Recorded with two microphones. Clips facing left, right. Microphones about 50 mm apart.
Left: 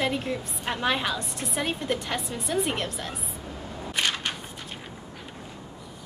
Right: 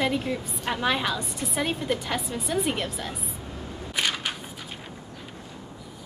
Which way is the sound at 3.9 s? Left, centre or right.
Centre.